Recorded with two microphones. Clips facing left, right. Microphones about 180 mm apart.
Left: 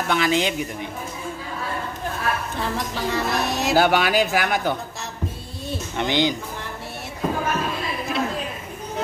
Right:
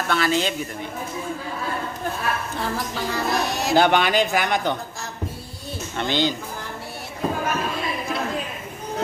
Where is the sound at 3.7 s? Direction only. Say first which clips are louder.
Right 1 dB; 5° left (ahead or behind).